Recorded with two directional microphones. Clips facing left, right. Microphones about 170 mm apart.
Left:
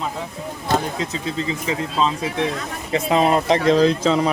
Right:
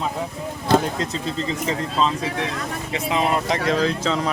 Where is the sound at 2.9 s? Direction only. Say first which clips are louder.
Left 5 dB; 35° left (ahead or behind).